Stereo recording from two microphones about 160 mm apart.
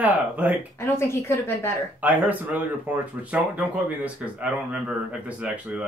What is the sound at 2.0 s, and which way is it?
Speech, 10° right (ahead or behind).